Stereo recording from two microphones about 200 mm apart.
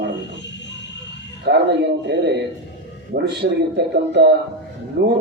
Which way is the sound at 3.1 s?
55° right (ahead or behind).